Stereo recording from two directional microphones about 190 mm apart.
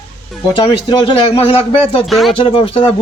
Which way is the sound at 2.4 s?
30° left (ahead or behind).